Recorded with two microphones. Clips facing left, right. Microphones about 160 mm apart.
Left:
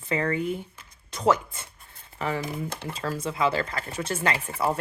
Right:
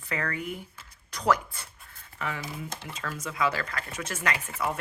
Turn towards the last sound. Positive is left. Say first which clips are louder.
# left 4 dB
turn(degrees=30)  # may be behind; listen again after turning